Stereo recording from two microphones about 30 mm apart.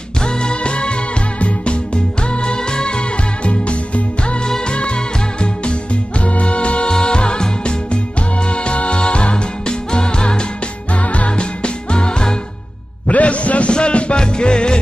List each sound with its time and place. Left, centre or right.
0.2 s music: left
2.2 s music: left
6.2 s music: left
6.9 s music: left
11.0 s music: left
11.3 s music: left
13.1 s music: left